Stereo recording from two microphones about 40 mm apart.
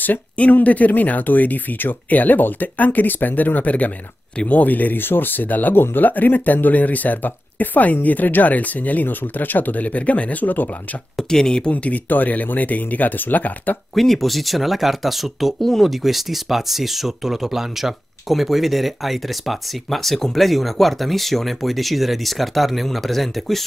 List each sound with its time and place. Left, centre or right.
0.0 s speech: left
11.1 s speech: centre
11.7 s speech: left
13.9 s speech: centre